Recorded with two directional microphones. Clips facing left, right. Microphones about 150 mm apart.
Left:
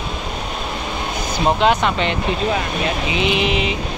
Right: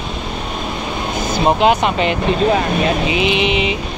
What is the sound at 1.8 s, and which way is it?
Speech, 5° right (ahead or behind).